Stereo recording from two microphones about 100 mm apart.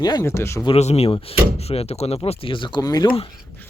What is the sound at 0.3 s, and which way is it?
Speech, 25° left (ahead or behind).